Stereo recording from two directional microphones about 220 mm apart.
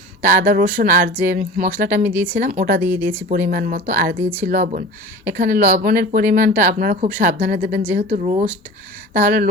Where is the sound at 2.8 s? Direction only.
10° right (ahead or behind).